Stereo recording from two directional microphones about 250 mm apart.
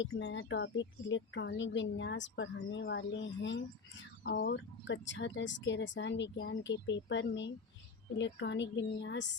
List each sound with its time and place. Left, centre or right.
0.0 s speech: left